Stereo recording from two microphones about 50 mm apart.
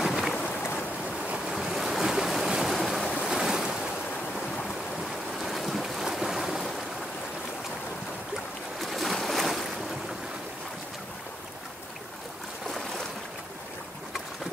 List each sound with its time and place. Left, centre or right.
0.0 s a sound: centre
0.6 s a sound: left
1.5 s waves: centre
3.3 s waves: centre
5.4 s boat: centre
8.7 s boat: centre
12.6 s boat: centre